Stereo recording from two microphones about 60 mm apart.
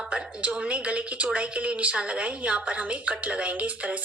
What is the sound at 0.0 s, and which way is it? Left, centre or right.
Speech, centre.